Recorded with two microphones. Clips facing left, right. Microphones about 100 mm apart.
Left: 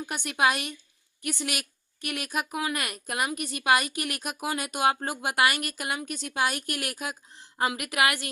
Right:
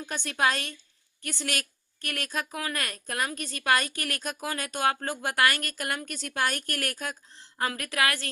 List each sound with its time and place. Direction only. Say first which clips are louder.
0.0 s a woman's voice: left 2 dB; 10° left (ahead or behind)